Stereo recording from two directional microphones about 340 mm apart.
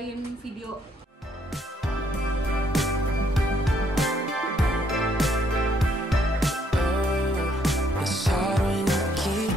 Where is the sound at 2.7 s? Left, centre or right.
Centre.